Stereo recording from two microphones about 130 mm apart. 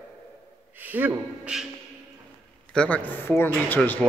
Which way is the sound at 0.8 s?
15° right (ahead or behind).